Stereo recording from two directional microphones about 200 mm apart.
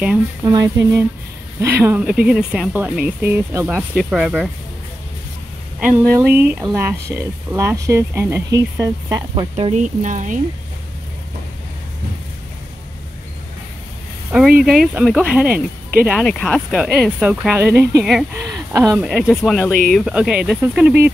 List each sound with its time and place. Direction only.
0.5 s speech: 15° right (ahead or behind); by 4.5 s centre (ahead or behind)
5.8 s speech: 10° right (ahead or behind); by 10.4 s 40° right (ahead or behind)
14.3 s speech: 5° right (ahead or behind)
16.1 s speech: 5° left (ahead or behind)